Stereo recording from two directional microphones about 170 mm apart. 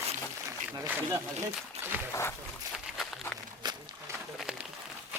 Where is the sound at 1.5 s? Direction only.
10° right (ahead or behind).